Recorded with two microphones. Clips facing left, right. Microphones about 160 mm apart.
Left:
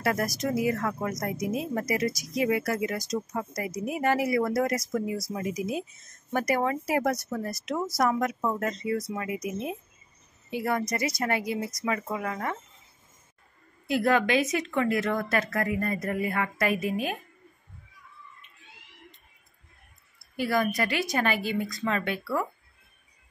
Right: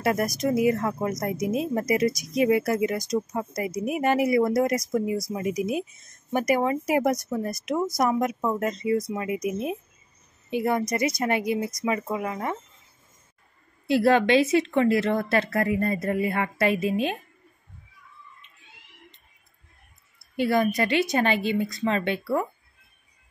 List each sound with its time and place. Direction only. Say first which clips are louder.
0.0 s speech: right 3 dB; 20° right (ahead or behind)
13.8 s speech: right 4 dB; 30° right (ahead or behind)
20.2 s speech: right 4 dB; 25° right (ahead or behind)